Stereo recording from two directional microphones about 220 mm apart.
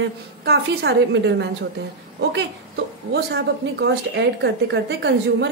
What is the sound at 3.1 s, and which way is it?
A woman's voice, 50° right (ahead or behind).